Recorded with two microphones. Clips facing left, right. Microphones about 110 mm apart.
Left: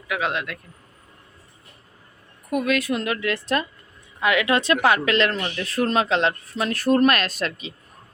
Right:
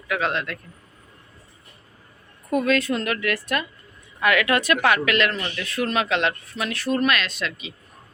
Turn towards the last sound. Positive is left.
turn(degrees=40)  # may be behind; listen again after turning